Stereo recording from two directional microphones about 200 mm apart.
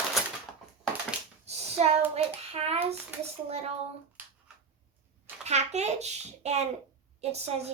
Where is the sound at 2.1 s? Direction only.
30° right (ahead or behind).